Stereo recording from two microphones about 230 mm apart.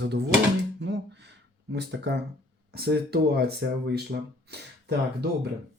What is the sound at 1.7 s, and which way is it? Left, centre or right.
Speech, right.